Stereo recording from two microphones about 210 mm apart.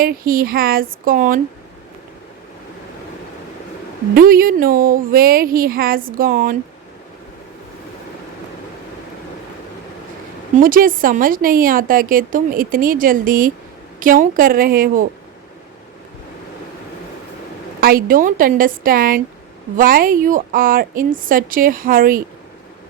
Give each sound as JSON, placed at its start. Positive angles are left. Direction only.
{"t": 0.0, "sound": "speech", "side_deg": -45}
{"t": 4.1, "sound": "speech", "side_deg": -45}
{"t": 10.6, "sound": "a woman's voice", "side_deg": -40}
{"t": 17.7, "sound": "a woman's voice", "side_deg": -45}